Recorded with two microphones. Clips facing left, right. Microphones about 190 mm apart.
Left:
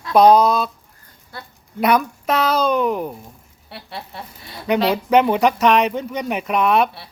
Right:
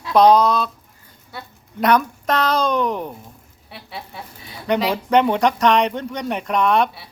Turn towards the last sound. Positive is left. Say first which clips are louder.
# left 1 dB
turn(degrees=5)  # may be behind; listen again after turning